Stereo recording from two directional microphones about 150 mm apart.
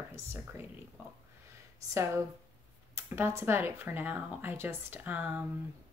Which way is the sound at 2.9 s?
15° right (ahead or behind).